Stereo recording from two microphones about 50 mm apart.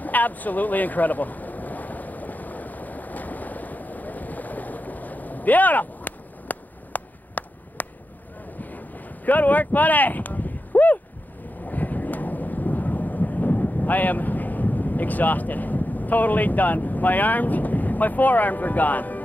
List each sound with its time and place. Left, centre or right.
0.0 s a sound: left
8.5 s wind: left
11.6 s thunder: left